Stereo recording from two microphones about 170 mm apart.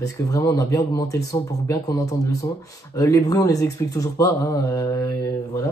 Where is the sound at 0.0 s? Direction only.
20° left (ahead or behind).